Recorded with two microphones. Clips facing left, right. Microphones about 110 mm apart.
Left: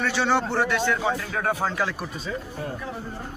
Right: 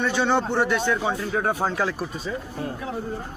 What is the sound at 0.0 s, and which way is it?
Speech, 15° right (ahead or behind).